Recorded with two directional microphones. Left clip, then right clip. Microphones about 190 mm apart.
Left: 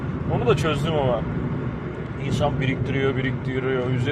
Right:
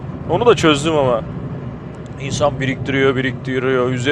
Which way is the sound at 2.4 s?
45° right (ahead or behind).